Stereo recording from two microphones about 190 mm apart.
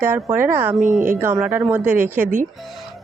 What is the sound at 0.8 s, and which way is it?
Speech, 40° right (ahead or behind).